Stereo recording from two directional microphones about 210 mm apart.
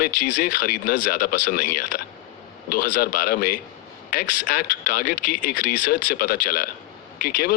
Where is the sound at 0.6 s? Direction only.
45° left (ahead or behind).